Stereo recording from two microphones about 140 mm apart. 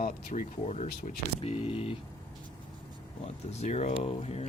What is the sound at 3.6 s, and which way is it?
Speech, 50° left (ahead or behind).